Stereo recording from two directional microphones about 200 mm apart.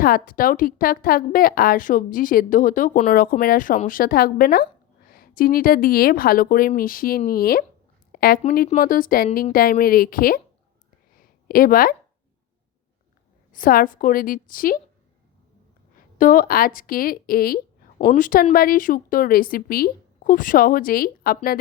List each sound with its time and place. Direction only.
0.0 s a woman's voice: 45° left (ahead or behind)
8.1 s a sound: 50° left (ahead or behind)
8.4 s a woman's voice: 40° left (ahead or behind)
11.4 s a woman's voice: 45° left (ahead or behind)
13.5 s a woman's voice: 45° left (ahead or behind)
16.1 s a woman's voice: 45° left (ahead or behind)
18.0 s a woman's voice: 35° left (ahead or behind)